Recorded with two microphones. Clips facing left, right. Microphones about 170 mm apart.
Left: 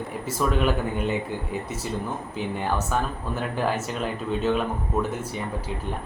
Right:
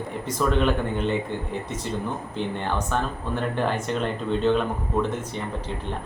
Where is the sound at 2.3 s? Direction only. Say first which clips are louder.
Left 1 dB; 5° left (ahead or behind).